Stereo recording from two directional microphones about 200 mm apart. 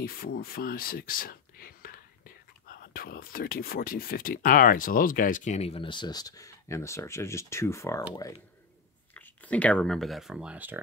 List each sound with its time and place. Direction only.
0.0 s speech: 50° left (ahead or behind); by 8.0 s 15° left (ahead or behind)
9.1 s speech: 10° left (ahead or behind); by 10.8 s 10° right (ahead or behind)